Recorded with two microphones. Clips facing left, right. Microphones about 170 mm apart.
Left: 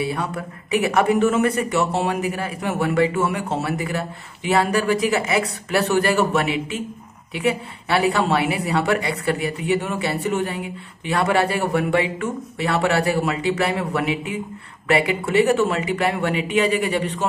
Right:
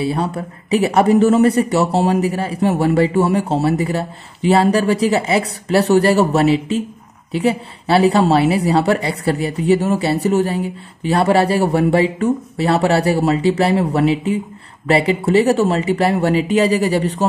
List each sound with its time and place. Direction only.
0.0 s speech: 30° right (ahead or behind)